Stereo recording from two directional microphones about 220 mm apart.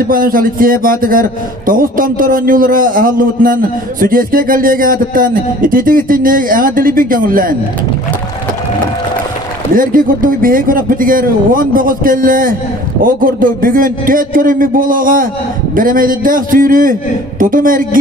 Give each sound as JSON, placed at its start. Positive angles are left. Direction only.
{"t": 0.0, "sound": "speech", "side_deg": -40}
{"t": 9.8, "sound": "speech", "side_deg": -40}